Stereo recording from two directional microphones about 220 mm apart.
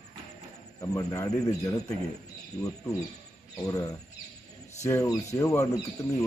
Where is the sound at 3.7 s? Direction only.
15° left (ahead or behind).